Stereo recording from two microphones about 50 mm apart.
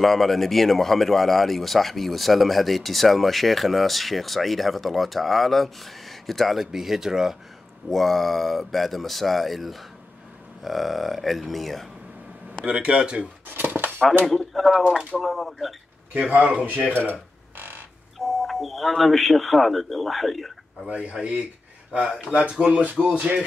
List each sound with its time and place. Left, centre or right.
0.0 s speech: centre
7.9 s speech: centre
12.6 s speech: centre
13.5 s cutlery: right
14.2 s speech: centre
16.2 s speech: right
17.6 s chicken: right
18.2 s speech: centre
20.9 s speech: right